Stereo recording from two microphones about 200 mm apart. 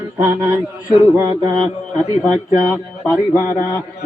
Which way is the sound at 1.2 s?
25° right (ahead or behind).